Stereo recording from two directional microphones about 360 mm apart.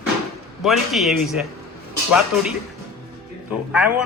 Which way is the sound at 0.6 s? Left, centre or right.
Centre.